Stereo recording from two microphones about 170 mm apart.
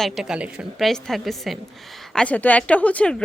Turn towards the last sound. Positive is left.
turn(degrees=5)  # may be behind; listen again after turning